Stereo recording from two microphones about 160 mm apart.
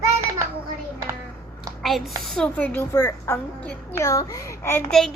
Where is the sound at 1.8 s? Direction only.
Centre (ahead or behind).